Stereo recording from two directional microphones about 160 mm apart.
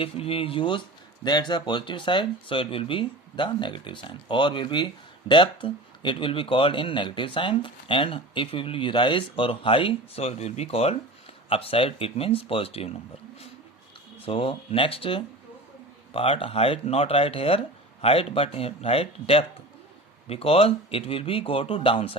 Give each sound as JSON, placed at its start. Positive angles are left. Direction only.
{"t": 0.0, "sound": "speech", "side_deg": 35}
{"t": 14.2, "sound": "speech", "side_deg": 35}